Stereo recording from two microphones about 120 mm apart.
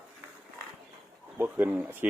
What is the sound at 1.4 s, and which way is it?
Speech, 15° right (ahead or behind).